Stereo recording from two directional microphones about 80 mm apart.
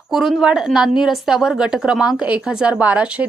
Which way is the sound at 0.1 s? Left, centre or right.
Centre.